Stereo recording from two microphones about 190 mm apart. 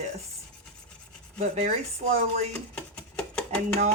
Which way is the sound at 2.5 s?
5° left (ahead or behind).